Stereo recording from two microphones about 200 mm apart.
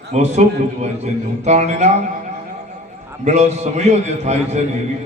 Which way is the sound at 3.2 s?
35° right (ahead or behind).